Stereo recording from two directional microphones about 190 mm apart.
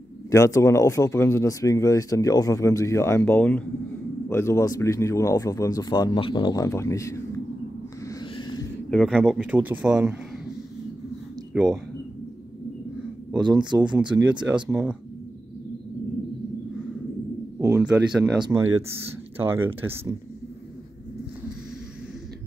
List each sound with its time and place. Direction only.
0.3 s speech: 15° left (ahead or behind)
8.1 s a sound: 25° left (ahead or behind)
8.9 s speech: 5° left (ahead or behind)
9.5 s speech: 10° right (ahead or behind)
11.5 s speech: 5° right (ahead or behind)
13.4 s speech: 25° right (ahead or behind)
14.1 s speech: 5° right (ahead or behind)
17.6 s speech: 15° right (ahead or behind)